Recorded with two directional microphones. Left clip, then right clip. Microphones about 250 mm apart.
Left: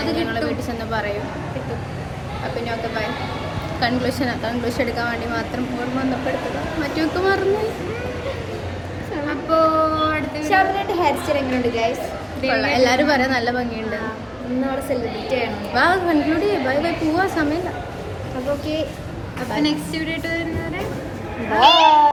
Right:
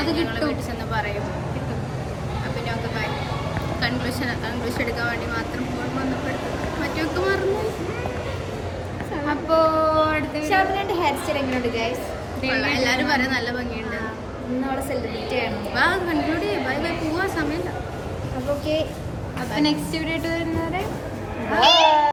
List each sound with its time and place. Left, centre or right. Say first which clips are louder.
3.8 s a woman's voice: left 7 dB; centre
6.8 s a woman's voice: left 4 dB; centre
9.3 s female singing: left 2 dB; right
10.5 s a woman's voice: left 3 dB; centre
12.5 s a woman's voice: left 5 dB; centre
15.7 s a woman's voice: left 4 dB; centre
19.5 s a woman's voice: left 1 dB; right
21.5 s a woman's voice: left 3 dB; centre